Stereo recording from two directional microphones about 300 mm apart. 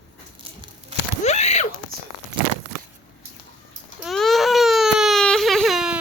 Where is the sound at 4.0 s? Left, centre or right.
Centre.